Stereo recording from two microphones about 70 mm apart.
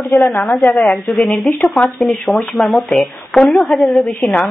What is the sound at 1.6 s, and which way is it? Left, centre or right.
Speech, centre.